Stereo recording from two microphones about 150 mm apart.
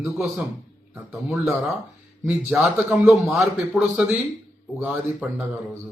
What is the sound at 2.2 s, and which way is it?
Speech, 5° right (ahead or behind).